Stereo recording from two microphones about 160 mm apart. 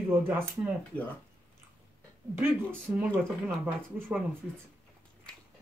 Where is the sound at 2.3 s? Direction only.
10° right (ahead or behind).